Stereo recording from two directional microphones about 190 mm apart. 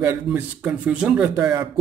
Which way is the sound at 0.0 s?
10° right (ahead or behind).